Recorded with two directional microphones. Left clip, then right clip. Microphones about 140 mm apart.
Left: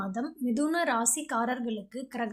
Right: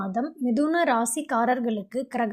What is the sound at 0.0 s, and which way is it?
A woman's voice, 25° right (ahead or behind).